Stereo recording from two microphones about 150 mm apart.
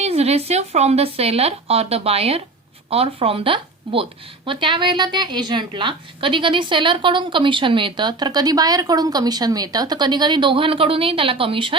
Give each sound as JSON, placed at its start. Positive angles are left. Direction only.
{"t": 0.0, "sound": "a woman's voice", "side_deg": -45}